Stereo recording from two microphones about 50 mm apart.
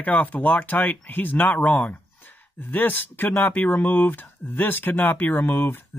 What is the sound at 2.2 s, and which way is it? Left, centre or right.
Speech, left.